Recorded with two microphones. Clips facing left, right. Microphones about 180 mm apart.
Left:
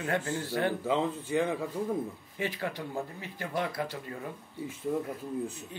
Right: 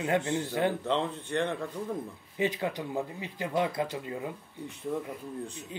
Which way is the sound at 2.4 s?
20° right (ahead or behind).